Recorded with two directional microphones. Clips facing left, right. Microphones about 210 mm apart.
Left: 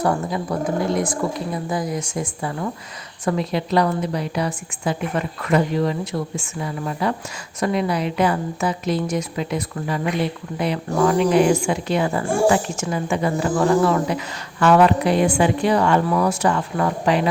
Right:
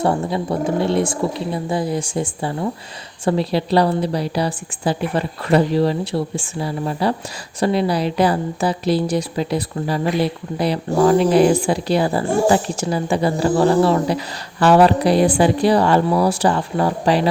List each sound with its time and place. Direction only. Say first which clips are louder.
0.0 s speech: right 2 dB; 25° right (ahead or behind)